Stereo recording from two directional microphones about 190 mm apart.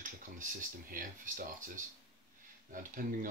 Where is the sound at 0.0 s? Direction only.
45° right (ahead or behind).